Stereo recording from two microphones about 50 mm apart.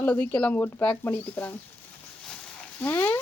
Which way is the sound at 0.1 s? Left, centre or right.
Left.